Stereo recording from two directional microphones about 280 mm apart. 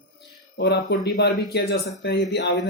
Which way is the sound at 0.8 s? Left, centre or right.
Left.